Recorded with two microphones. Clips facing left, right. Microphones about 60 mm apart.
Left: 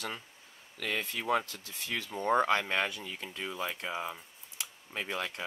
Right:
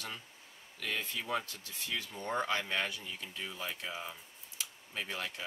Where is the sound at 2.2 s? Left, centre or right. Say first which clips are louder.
Left 9 dB; left.